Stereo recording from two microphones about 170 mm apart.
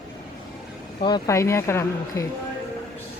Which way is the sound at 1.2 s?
15° left (ahead or behind).